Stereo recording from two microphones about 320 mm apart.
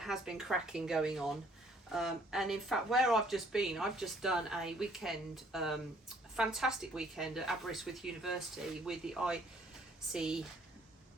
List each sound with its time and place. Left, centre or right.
0.0 s speech: centre